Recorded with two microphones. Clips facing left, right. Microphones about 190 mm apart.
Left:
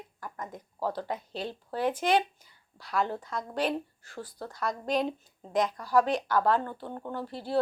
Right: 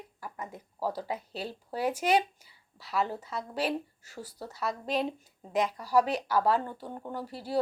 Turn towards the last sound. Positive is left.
turn(degrees=-10)  # may be behind; listen again after turning